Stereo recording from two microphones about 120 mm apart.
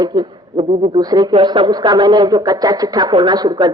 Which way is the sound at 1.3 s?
45° right (ahead or behind).